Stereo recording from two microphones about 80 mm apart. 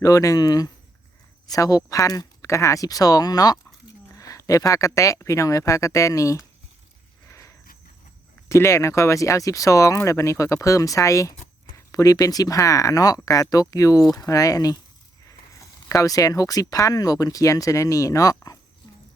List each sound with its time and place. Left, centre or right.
0.0 s speech: left
7.3 s horse: left
8.4 s speech: left